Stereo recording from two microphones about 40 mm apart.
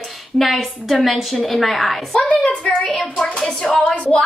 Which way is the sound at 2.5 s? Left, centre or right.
Left.